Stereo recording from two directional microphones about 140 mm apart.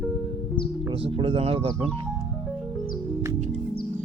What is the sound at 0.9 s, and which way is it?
Speech, 40° right (ahead or behind).